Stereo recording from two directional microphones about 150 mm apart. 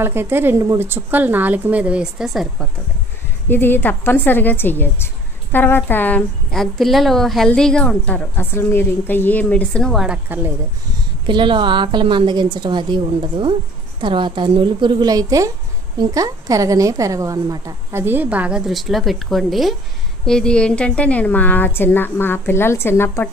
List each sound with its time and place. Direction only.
0.0 s a woman's voice: 15° right (ahead or behind)
3.4 s a woman's voice: 15° left (ahead or behind)
10.0 s a woman's voice: 10° right (ahead or behind)
11.2 s a woman's voice: 30° right (ahead or behind); by 23.3 s 15° left (ahead or behind)